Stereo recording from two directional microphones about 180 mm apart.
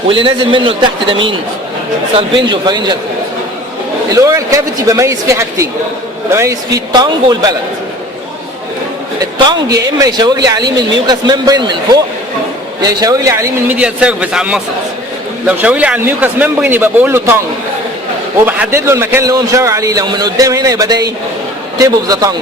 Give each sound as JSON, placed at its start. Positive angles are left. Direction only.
{"t": 0.1, "sound": "a man's voice", "side_deg": -30}
{"t": 2.1, "sound": "a man's voice", "side_deg": -25}
{"t": 4.1, "sound": "a man's voice", "side_deg": -20}
{"t": 9.4, "sound": "a man's voice", "side_deg": -20}
{"t": 12.8, "sound": "speech", "side_deg": -20}
{"t": 18.4, "sound": "a man's voice", "side_deg": -10}